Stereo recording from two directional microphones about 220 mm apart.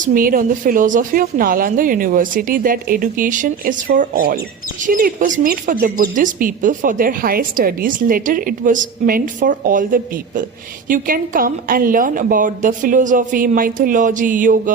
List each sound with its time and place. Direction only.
0.0 s speech: 40° right (ahead or behind)